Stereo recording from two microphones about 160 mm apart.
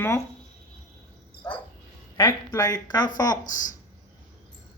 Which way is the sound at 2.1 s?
25° left (ahead or behind).